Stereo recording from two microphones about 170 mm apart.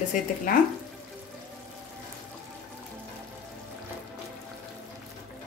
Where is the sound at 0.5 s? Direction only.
55° left (ahead or behind).